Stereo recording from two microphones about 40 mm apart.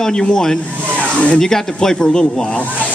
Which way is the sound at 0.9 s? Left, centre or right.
Left.